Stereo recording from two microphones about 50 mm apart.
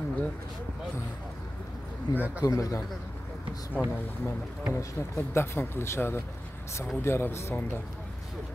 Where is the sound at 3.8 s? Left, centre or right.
Left.